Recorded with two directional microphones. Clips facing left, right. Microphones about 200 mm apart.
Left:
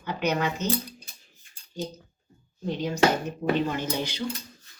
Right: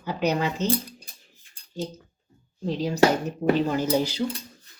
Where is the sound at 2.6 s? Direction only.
35° right (ahead or behind).